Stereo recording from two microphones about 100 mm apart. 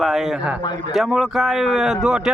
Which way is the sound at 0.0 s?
Centre (ahead or behind).